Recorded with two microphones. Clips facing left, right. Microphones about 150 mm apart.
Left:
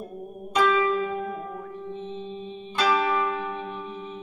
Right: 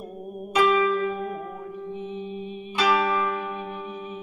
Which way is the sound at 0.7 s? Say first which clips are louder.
Right 1 dB; 15° right (ahead or behind).